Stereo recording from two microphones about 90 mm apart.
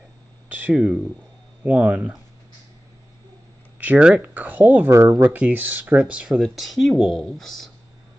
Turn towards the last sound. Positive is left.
turn(degrees=5)  # may be behind; listen again after turning